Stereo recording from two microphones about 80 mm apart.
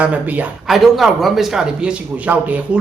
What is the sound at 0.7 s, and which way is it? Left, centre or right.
Speech, centre.